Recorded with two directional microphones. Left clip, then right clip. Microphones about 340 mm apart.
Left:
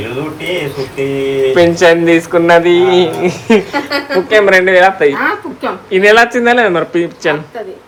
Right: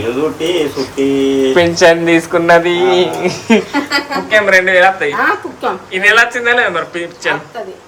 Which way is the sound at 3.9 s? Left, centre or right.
Centre.